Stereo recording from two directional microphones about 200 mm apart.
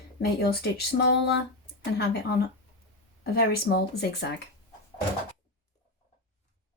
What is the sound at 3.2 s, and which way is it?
A woman's voice, 50° left (ahead or behind).